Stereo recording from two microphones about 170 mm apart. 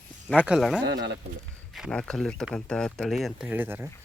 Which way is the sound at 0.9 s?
90° right.